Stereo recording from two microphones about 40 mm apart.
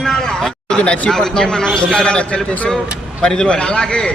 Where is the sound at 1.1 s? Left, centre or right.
Centre.